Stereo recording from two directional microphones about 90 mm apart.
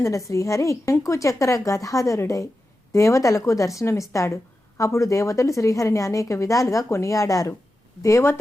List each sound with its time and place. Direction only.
0.0 s a woman's voice: 35° left (ahead or behind)